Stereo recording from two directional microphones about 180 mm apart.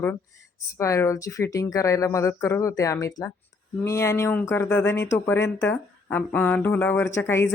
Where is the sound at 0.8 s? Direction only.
15° left (ahead or behind).